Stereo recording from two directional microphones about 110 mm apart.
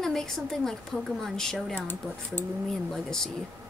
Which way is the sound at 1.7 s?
20° left (ahead or behind).